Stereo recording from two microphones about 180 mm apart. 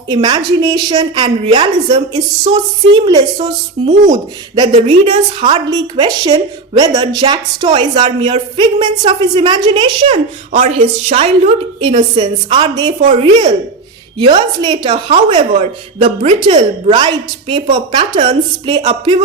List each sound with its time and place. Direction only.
0.1 s a woman's voice: 25° right (ahead or behind)